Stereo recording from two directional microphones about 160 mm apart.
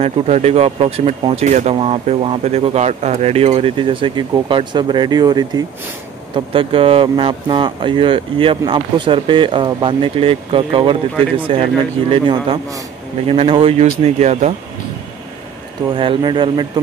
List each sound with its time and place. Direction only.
0.0 s speech: 40° right (ahead or behind)
16.0 s speech: 30° right (ahead or behind)